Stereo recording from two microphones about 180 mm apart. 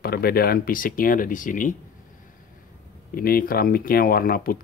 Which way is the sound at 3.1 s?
55° left (ahead or behind).